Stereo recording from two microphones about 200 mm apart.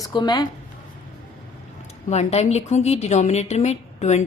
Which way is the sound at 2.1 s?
35° left (ahead or behind).